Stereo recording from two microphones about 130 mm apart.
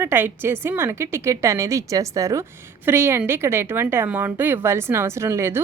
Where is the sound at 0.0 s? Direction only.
15° right (ahead or behind).